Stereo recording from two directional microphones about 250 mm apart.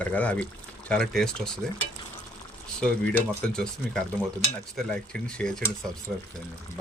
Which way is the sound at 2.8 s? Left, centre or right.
Centre.